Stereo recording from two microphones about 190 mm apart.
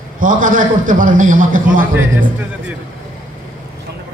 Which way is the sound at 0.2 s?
45° right (ahead or behind).